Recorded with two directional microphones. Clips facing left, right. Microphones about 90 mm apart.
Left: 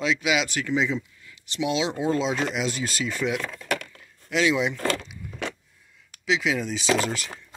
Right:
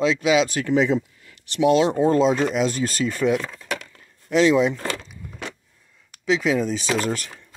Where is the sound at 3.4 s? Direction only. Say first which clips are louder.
Left 1 dB; 20° right (ahead or behind).